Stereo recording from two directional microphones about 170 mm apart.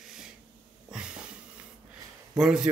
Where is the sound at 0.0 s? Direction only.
5° right (ahead or behind).